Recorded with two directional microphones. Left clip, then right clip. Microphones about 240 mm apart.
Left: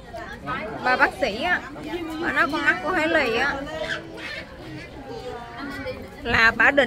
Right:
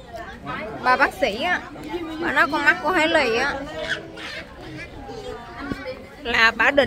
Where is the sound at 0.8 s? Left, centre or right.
Centre.